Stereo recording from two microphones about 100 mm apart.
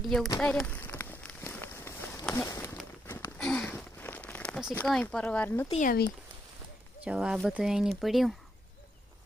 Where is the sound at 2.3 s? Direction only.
25° left (ahead or behind).